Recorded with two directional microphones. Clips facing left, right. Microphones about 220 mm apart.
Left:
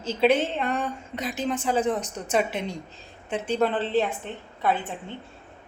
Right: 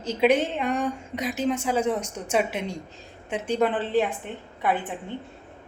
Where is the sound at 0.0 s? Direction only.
15° right (ahead or behind).